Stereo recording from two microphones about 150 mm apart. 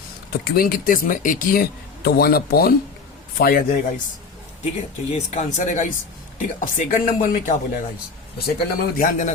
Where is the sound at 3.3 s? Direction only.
80° left.